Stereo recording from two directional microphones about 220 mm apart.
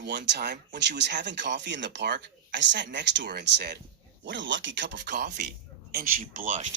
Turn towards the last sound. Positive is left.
turn(degrees=-35)  # may be behind; listen again after turning